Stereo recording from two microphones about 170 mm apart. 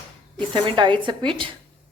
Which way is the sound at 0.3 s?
30° right (ahead or behind).